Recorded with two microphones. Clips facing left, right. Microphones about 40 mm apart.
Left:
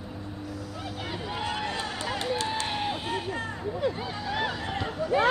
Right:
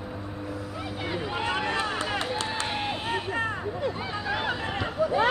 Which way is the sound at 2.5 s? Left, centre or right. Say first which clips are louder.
Even; right.